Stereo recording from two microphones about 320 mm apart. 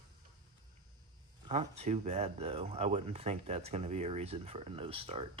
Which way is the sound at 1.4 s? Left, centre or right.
Centre.